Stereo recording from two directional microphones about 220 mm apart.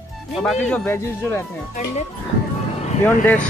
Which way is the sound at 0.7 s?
10° left (ahead or behind).